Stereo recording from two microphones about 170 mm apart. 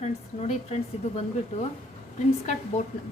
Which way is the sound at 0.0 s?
40° left (ahead or behind).